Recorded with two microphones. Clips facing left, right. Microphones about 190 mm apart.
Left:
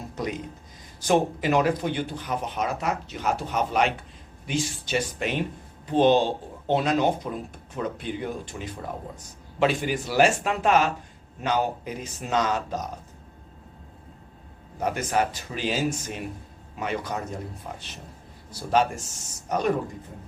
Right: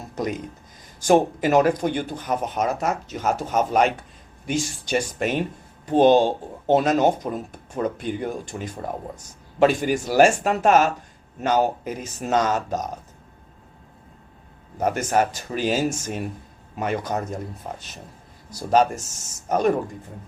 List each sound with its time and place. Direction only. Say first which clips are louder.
1.0 s speech: right 4 dB; 45° right (ahead or behind)
14.8 s speech: right 4 dB; 45° right (ahead or behind)